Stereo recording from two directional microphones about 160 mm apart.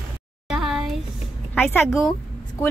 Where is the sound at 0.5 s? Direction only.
5° right (ahead or behind).